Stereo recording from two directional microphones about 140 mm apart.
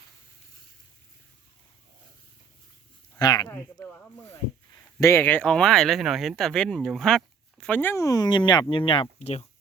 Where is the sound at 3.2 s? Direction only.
30° left (ahead or behind).